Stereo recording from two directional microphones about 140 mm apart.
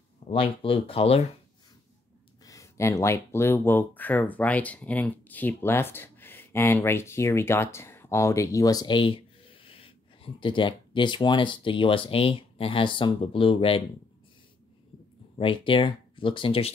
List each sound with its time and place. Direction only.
0.3 s speech: 40° left (ahead or behind)
2.4 s speech: 25° left (ahead or behind); by 13.8 s 40° left (ahead or behind)
15.3 s speech: 40° left (ahead or behind)